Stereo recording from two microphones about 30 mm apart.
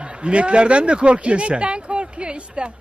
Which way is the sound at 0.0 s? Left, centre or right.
Right.